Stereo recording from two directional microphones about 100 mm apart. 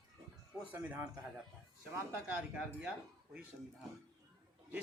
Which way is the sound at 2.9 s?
15° right (ahead or behind).